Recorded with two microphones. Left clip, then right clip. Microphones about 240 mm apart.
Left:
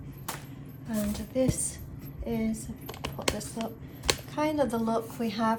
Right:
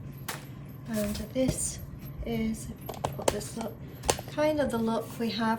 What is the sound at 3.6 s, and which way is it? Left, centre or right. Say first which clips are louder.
A woman's voice: left 1 dB; left.